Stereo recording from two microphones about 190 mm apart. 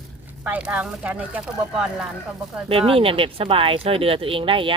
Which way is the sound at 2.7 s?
30° right (ahead or behind).